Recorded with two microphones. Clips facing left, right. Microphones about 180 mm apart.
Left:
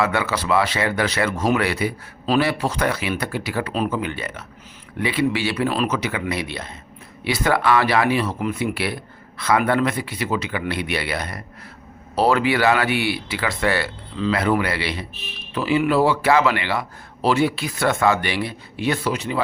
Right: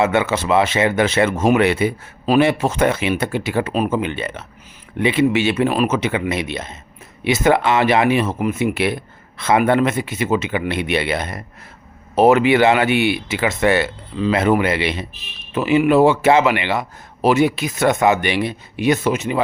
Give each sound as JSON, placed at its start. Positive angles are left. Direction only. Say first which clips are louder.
{"t": 0.0, "sound": "speech", "louder": "right 4 dB", "side_deg": -25}